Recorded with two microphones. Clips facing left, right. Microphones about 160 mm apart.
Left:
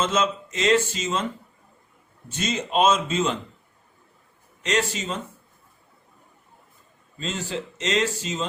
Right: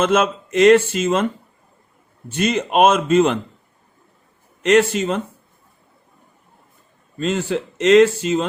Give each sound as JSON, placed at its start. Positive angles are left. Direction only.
{"t": 0.0, "sound": "speech", "side_deg": -60}
{"t": 2.3, "sound": "speech", "side_deg": -60}
{"t": 4.6, "sound": "speech", "side_deg": -60}
{"t": 7.2, "sound": "speech", "side_deg": -55}